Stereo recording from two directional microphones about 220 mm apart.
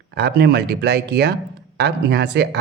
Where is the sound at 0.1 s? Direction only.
45° right (ahead or behind).